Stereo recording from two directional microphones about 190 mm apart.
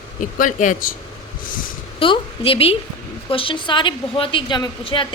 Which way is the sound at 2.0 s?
30° left (ahead or behind).